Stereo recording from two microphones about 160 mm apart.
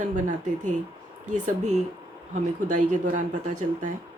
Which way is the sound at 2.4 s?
50° right (ahead or behind).